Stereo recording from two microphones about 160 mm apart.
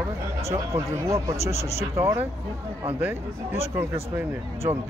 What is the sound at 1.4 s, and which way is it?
Speech, 40° left (ahead or behind).